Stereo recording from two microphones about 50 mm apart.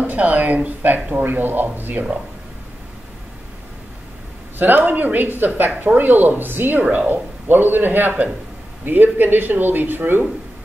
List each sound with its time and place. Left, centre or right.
0.0 s speech: right
4.6 s speech: right